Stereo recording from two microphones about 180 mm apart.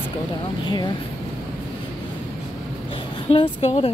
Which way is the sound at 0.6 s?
25° left (ahead or behind).